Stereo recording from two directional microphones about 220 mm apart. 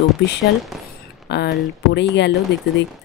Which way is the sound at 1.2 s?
50° left (ahead or behind).